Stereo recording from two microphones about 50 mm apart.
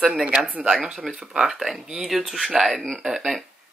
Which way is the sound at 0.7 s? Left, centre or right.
Centre.